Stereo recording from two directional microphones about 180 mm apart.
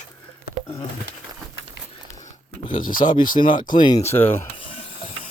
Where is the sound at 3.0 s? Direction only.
25° left (ahead or behind).